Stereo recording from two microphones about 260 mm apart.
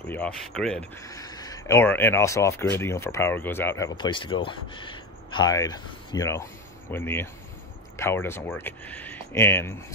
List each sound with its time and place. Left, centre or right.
0.1 s speech: centre